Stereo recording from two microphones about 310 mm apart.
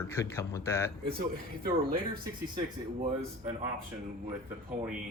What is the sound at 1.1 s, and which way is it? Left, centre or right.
Speech, right.